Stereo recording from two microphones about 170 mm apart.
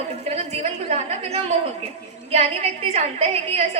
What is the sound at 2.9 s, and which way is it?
Speech, 35° right (ahead or behind).